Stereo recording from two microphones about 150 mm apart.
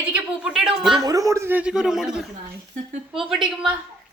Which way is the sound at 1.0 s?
20° right (ahead or behind).